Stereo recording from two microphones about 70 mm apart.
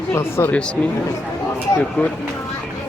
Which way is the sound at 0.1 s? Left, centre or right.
Left.